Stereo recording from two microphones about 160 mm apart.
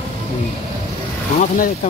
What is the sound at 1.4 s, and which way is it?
Speech, 55° left (ahead or behind).